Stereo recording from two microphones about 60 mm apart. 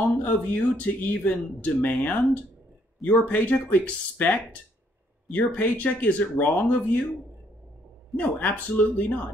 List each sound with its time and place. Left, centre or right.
0.2 s speech: left
8.2 s speech: left